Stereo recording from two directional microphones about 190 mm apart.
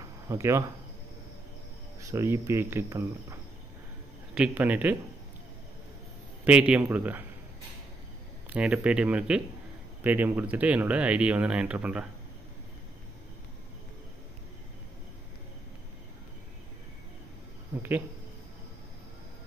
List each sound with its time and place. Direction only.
0.3 s speech: 15° right (ahead or behind)
2.0 s speech: 15° right (ahead or behind)
4.4 s speech: 10° right (ahead or behind)
6.4 s speech: 5° right (ahead or behind)
8.5 s speech: 5° right (ahead or behind)